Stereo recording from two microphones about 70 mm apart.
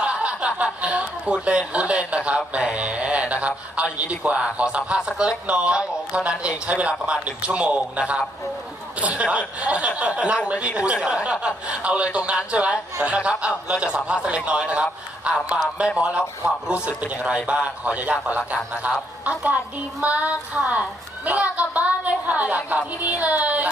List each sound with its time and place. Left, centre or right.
0.0 s a woman's voice: centre